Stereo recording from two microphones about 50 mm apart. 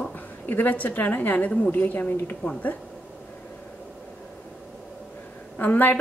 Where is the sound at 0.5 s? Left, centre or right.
Left.